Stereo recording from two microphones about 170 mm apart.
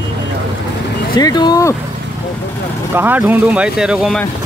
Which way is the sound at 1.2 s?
25° left (ahead or behind).